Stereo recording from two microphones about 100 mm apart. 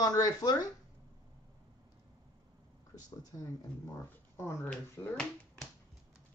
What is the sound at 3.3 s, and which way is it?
Speech, 40° left (ahead or behind).